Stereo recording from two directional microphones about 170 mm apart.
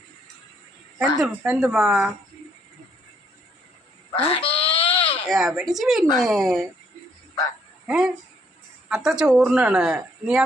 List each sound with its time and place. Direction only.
1.2 s speech: 5° right (ahead or behind)
4.3 s bleat: 35° left (ahead or behind)
5.3 s speech: centre (ahead or behind)
7.9 s speech: 5° right (ahead or behind)